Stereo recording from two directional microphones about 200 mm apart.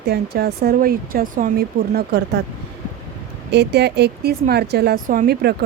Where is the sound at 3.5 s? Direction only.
55° right (ahead or behind).